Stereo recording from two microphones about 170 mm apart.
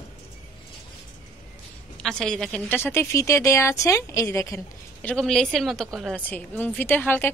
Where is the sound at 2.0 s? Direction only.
5° left (ahead or behind).